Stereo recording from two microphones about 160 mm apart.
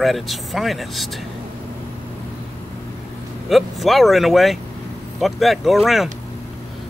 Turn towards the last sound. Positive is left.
turn(degrees=0)  # may be behind; listen again after turning